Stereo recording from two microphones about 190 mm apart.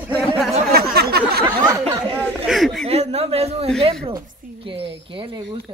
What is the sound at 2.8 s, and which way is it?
A man's voice, 35° right (ahead or behind).